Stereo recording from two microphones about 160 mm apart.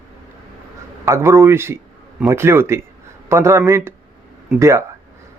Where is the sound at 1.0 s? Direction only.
20° right (ahead or behind).